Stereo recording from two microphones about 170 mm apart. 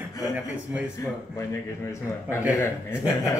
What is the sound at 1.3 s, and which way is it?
Speech, 15° left (ahead or behind).